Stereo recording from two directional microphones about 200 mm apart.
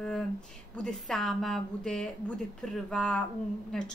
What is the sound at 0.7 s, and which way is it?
A woman's voice, 5° left (ahead or behind).